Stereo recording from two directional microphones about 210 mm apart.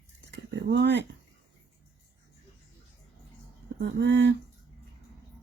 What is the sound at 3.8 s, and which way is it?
Speech, 55° right (ahead or behind).